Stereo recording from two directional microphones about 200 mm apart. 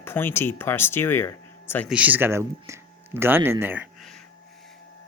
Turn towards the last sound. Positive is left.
turn(degrees=-10)  # may be behind; listen again after turning